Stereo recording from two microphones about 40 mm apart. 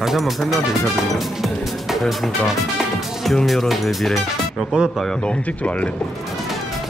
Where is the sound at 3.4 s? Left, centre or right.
Centre.